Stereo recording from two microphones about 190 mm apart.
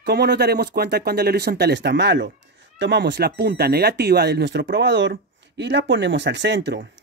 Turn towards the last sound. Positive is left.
turn(degrees=-65)  # may be behind; listen again after turning